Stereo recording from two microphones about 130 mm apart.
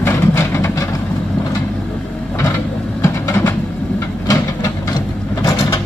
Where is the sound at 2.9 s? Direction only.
20° left (ahead or behind).